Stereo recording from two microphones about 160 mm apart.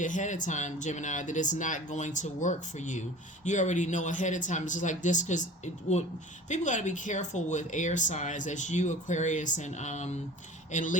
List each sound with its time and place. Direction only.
0.0 s speech: 50° left (ahead or behind)
6.5 s speech: 50° left (ahead or behind)